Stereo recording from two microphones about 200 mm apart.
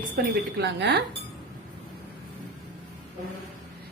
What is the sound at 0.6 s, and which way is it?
Speech, 55° right (ahead or behind).